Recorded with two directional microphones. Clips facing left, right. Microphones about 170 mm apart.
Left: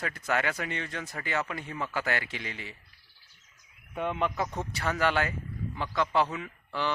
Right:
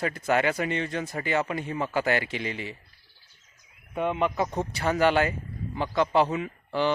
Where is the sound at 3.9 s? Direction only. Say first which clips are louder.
Right 4 dB; 10° right (ahead or behind).